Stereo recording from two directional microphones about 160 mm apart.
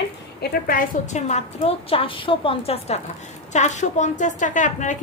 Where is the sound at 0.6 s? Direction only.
60° left (ahead or behind).